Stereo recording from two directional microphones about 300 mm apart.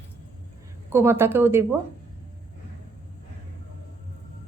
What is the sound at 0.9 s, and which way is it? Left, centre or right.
Speech, centre.